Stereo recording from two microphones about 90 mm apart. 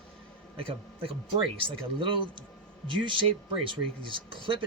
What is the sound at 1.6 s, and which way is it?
Speech, 70° right (ahead or behind).